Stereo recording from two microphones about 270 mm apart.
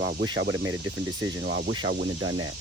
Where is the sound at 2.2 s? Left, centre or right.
Right.